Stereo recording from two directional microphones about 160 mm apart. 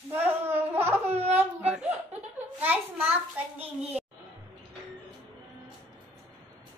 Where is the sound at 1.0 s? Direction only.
40° right (ahead or behind).